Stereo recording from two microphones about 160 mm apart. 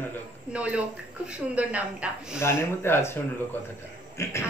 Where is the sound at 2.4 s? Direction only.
15° left (ahead or behind).